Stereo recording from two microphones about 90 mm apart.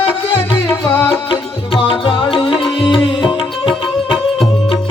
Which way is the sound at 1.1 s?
85° left.